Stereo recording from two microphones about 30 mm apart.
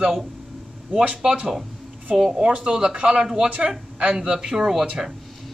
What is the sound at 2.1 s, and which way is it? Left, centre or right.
Speech, centre.